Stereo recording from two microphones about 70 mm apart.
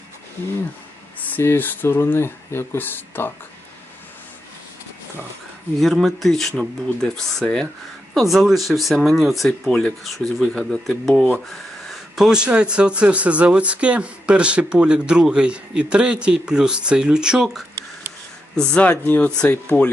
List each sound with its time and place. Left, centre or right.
1.4 s speech: left
5.8 s speech: centre
8.1 s speech: centre
9.6 s speech: centre
18.5 s speech: centre
18.8 s speech: left